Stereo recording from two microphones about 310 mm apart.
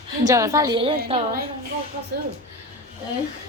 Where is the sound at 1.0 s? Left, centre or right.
Right.